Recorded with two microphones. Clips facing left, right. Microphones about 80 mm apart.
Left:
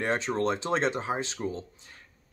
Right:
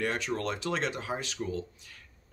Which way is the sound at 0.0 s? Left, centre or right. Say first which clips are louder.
Left 4 dB; left.